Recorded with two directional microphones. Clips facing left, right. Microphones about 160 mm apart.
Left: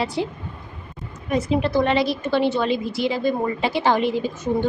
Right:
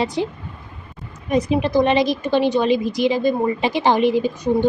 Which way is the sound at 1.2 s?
15° right (ahead or behind).